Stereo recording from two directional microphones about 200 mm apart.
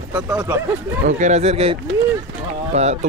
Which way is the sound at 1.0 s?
35° right (ahead or behind).